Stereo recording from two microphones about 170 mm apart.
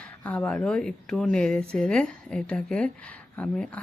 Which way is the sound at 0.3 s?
5° left (ahead or behind).